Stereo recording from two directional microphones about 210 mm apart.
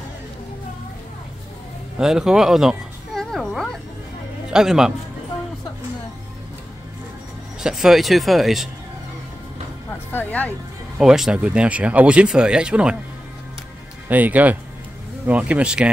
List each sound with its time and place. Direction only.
2.0 s a sound: 5° right (ahead or behind)
4.5 s a man's voice: 5° right (ahead or behind)
7.6 s speech: centre (ahead or behind)
10.1 s speech: 10° left (ahead or behind)
14.0 s speech: 10° right (ahead or behind)